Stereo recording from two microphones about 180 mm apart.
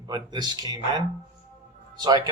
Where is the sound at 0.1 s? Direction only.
25° right (ahead or behind).